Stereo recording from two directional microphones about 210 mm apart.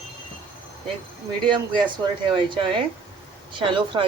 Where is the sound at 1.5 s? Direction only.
20° right (ahead or behind).